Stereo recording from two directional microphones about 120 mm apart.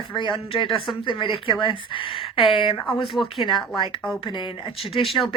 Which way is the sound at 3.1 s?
Centre (ahead or behind).